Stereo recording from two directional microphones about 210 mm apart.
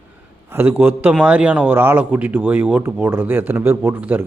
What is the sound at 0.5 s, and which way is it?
Speech, 10° right (ahead or behind).